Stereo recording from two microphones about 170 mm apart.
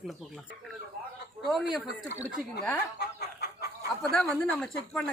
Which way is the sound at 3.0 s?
70° left (ahead or behind).